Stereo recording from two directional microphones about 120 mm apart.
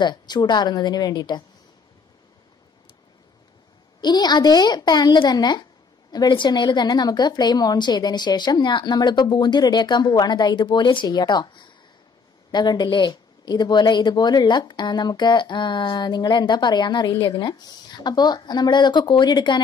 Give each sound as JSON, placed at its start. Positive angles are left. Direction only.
{"t": 0.0, "sound": "speech", "side_deg": 35}
{"t": 4.0, "sound": "speech", "side_deg": 35}